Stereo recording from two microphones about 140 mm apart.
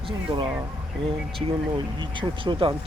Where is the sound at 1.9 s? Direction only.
35° right (ahead or behind).